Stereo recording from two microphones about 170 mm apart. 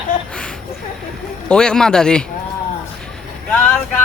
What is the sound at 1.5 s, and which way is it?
Speech, 5° left (ahead or behind).